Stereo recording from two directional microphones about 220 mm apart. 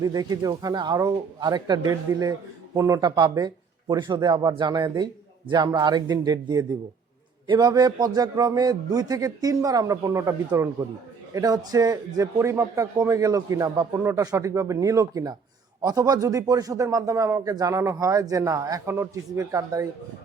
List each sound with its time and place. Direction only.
0.0 s a man's voice: 15° right (ahead or behind)